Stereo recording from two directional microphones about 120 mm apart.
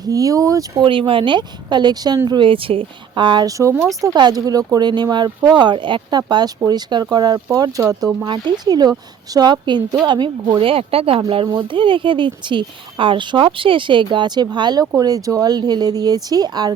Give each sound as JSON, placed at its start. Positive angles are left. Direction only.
{"t": 0.0, "sound": "speech", "side_deg": -30}
{"t": 0.9, "sound": "speech", "side_deg": -45}